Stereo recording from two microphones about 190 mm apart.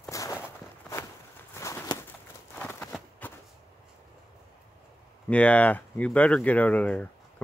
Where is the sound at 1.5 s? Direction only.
15° left (ahead or behind).